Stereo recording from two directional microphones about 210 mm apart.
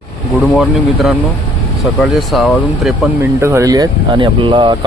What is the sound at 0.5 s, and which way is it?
Speech, centre (ahead or behind).